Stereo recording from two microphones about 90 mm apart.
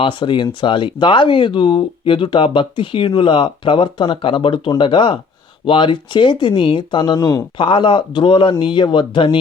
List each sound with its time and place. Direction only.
0.0 s speech: 70° left (ahead or behind); by 7.3 s 50° left (ahead or behind)
7.6 s speech: 65° left (ahead or behind)